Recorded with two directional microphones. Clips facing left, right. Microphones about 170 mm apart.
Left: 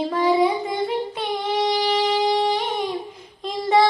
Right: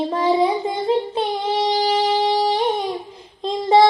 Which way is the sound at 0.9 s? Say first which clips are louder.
Right 5 dB; 30° right (ahead or behind).